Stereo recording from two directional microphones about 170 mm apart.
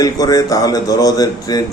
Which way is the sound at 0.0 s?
20° left (ahead or behind).